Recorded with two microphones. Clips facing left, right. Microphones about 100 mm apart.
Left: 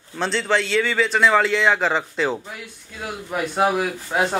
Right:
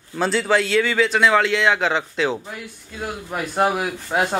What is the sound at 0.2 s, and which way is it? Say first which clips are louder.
A man's voice: right 2 dB; 5° right (ahead or behind).